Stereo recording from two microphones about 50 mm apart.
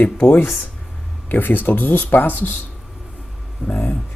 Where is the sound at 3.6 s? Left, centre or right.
Left.